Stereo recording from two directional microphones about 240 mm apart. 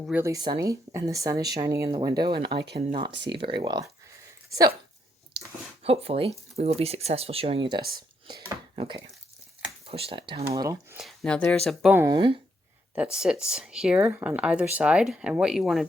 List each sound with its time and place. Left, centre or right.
0.0 s speech: centre
5.8 s speech: right
7.8 s speech: right
8.7 s speech: right
10.9 s speech: centre
13.0 s speech: centre